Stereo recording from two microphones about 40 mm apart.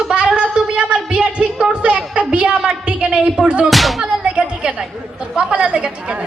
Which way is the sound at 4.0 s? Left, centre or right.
Right.